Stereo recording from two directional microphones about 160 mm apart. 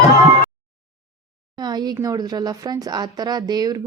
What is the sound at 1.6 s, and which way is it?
Speech, 25° right (ahead or behind).